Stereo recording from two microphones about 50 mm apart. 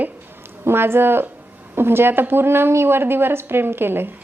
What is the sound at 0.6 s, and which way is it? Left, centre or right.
A woman's voice, right.